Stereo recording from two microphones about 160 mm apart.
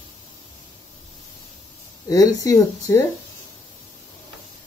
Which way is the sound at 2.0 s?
20° left (ahead or behind).